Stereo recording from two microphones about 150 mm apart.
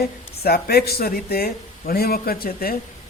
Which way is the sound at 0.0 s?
90° left.